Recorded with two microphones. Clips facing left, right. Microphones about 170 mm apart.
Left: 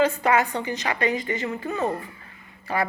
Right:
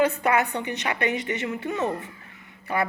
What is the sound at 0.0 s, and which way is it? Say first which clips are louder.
A woman's voice: left 1 dB; 60° right (ahead or behind).